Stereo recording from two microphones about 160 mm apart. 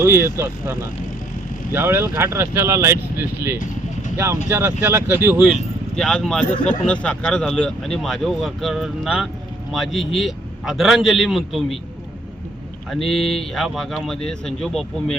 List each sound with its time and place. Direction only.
0.0 s speech: 15° right (ahead or behind)
6.0 s speech: 5° left (ahead or behind)
6.4 s speech: 50° left (ahead or behind)
6.7 s speech: 5° left (ahead or behind)
12.9 s speech: centre (ahead or behind)